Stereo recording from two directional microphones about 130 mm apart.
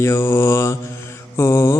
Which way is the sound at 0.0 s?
20° left (ahead or behind).